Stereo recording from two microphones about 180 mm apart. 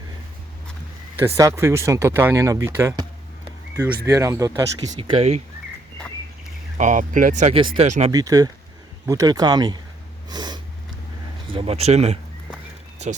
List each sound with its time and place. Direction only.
1.2 s speech: 15° right (ahead or behind)
4.9 s speech: 30° right (ahead or behind)
6.7 s speech: 45° right (ahead or behind)
8.1 s speech: 20° right (ahead or behind)
10.2 s snort: 25° right (ahead or behind)
11.4 s speech: 30° right (ahead or behind)